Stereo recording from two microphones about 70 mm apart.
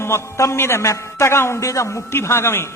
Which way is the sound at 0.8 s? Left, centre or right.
Left.